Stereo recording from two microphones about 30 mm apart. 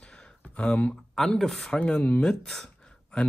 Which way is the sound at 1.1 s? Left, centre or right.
Centre.